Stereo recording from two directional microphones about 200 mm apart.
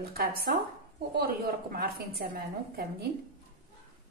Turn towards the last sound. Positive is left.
turn(degrees=-50)  # may be behind; listen again after turning